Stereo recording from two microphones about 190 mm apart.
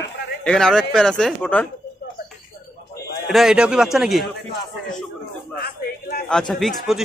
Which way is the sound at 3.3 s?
Centre (ahead or behind).